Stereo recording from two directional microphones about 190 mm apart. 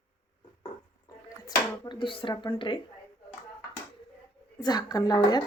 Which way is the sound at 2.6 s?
25° left (ahead or behind).